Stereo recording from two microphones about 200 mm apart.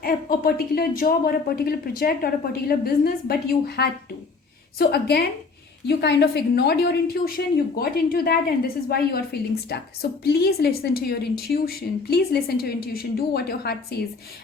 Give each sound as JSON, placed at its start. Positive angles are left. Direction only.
{"t": 0.0, "sound": "a woman's voice", "side_deg": 50}